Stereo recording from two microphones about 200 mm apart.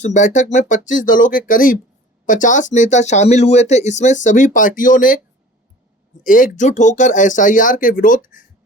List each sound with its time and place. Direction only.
0.0 s speech: 35° left (ahead or behind)
6.2 s speech: 40° left (ahead or behind)